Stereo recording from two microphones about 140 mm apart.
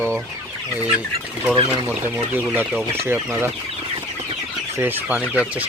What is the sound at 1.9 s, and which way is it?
Speech, 15° right (ahead or behind).